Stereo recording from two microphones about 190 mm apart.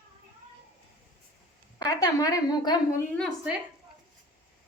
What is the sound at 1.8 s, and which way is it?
A woman's voice, 20° left (ahead or behind).